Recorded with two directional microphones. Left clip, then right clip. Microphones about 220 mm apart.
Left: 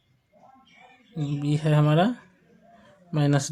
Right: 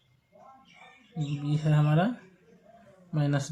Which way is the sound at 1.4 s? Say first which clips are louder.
Left 6 dB; 50° left (ahead or behind).